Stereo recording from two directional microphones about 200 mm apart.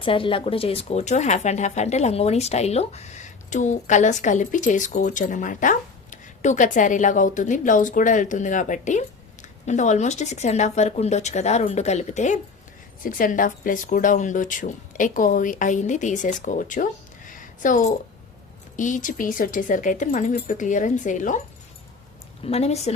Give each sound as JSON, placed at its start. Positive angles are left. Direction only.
{"t": 0.0, "sound": "speech", "side_deg": 25}
{"t": 22.4, "sound": "speech", "side_deg": 30}